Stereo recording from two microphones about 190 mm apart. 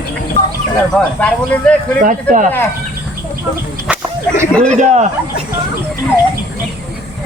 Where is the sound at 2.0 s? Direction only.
40° right (ahead or behind).